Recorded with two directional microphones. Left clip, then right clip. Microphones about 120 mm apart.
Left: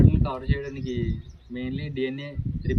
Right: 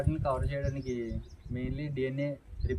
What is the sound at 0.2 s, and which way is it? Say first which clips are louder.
Speech: left 2 dB; 35° right (ahead or behind).